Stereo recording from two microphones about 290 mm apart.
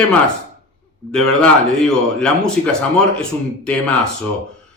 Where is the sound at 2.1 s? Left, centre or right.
Centre.